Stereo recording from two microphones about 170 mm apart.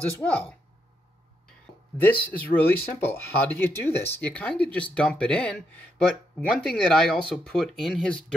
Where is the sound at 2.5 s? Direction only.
10° left (ahead or behind).